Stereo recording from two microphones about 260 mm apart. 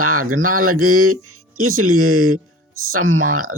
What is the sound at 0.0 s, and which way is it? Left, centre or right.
Speech, right.